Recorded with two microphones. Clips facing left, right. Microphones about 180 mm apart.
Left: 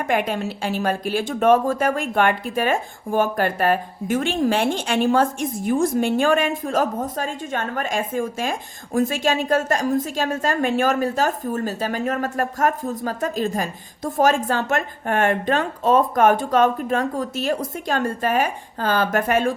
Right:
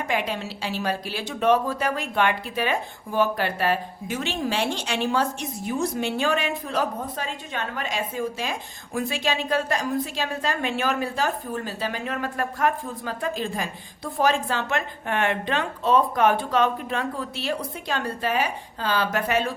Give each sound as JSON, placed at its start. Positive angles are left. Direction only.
{"t": 0.0, "sound": "speech", "side_deg": 50}